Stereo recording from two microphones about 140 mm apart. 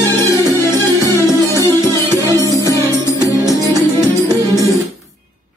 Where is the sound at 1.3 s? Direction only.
25° right (ahead or behind).